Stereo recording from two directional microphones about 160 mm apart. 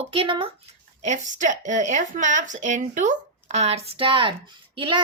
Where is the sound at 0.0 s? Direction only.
35° right (ahead or behind).